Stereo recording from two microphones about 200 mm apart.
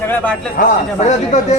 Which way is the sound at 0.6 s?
45° left (ahead or behind).